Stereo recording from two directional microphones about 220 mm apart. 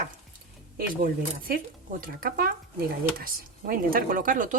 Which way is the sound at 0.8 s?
40° right (ahead or behind).